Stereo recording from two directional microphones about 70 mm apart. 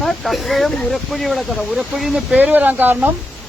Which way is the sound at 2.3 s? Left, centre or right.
Right.